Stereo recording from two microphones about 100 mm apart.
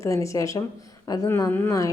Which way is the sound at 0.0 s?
30° left (ahead or behind).